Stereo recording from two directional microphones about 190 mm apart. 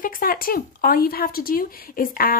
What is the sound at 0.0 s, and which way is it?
A woman's voice, 50° left (ahead or behind).